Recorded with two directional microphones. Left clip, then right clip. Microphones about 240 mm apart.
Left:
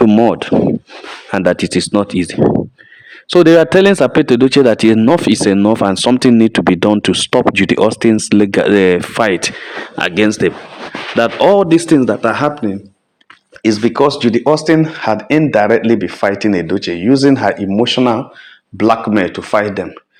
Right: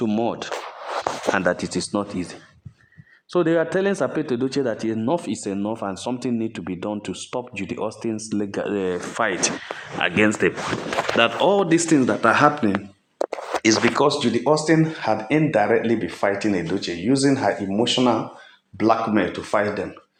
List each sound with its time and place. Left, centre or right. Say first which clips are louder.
0.1 s speech: left 13 dB; left
8.9 s speech: left 11 dB; left
11.2 s speech: left 9 dB; centre
13.6 s speech: left 6 dB; left